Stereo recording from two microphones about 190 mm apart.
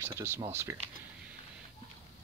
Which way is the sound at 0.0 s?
10° right (ahead or behind).